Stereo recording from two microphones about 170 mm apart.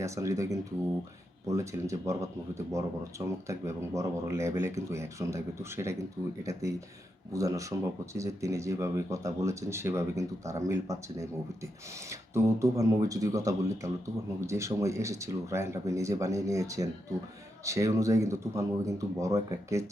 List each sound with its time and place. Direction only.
0.0 s speech: 20° right (ahead or behind)
12.3 s speech: 15° right (ahead or behind)